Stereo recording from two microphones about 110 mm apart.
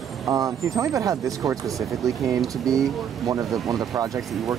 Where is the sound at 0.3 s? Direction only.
30° right (ahead or behind).